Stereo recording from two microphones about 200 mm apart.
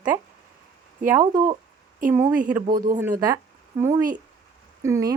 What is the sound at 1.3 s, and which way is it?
Speech, 20° right (ahead or behind).